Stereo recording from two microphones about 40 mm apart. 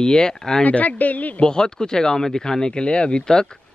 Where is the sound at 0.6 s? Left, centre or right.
Left.